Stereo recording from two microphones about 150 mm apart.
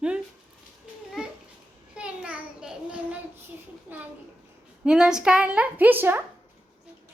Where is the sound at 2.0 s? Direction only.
5° right (ahead or behind).